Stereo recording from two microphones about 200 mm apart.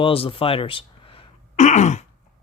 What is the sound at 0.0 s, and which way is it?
Speech, 25° left (ahead or behind).